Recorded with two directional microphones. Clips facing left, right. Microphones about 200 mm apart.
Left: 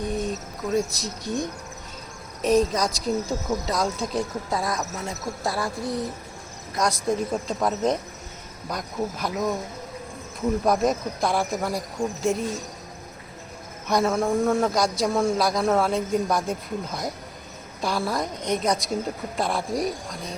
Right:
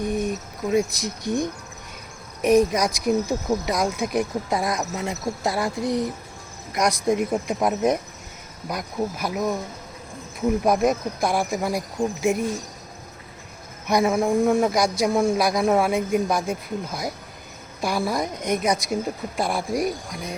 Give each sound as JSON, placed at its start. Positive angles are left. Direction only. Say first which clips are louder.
{"t": 0.2, "sound": "speech", "louder": "right 2 dB", "side_deg": -15}
{"t": 2.4, "sound": "speech", "louder": "right 3 dB", "side_deg": -15}
{"t": 10.7, "sound": "speech", "louder": "right 1 dB", "side_deg": -10}
{"t": 13.8, "sound": "speech", "louder": "right 2 dB", "side_deg": -15}